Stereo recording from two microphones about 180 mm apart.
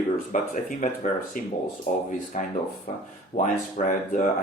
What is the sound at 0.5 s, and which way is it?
Speech, 45° left (ahead or behind).